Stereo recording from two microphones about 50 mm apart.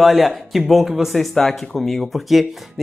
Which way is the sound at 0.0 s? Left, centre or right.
Centre.